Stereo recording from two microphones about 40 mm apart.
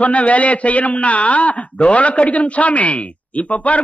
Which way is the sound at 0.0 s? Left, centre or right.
Left.